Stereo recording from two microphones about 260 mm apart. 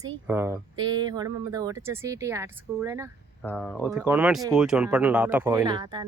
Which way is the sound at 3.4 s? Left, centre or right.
Centre.